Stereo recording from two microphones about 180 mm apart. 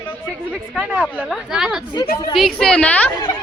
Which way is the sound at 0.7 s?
5° right (ahead or behind).